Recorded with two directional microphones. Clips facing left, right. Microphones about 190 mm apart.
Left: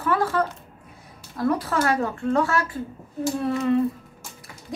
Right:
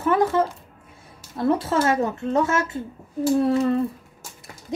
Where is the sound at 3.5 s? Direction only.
35° right (ahead or behind).